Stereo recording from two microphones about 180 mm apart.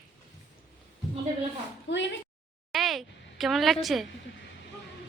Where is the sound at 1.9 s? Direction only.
80° left.